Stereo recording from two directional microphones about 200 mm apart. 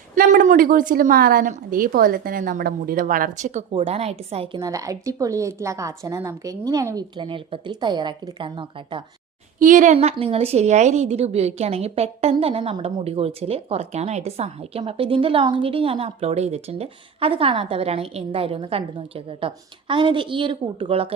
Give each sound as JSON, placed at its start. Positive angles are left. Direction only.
{"t": 0.2, "sound": "a woman's voice", "side_deg": -40}
{"t": 4.6, "sound": "a woman's voice", "side_deg": -15}
{"t": 9.6, "sound": "a woman's voice", "side_deg": -40}